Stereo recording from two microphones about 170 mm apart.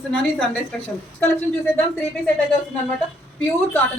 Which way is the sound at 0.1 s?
5° left (ahead or behind).